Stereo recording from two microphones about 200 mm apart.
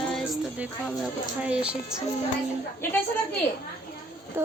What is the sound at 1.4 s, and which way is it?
Speech, 5° right (ahead or behind).